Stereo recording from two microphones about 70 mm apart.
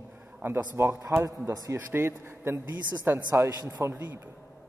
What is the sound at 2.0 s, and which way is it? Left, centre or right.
A man's voice, right.